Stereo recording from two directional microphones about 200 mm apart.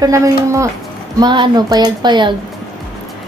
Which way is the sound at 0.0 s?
15° right (ahead or behind).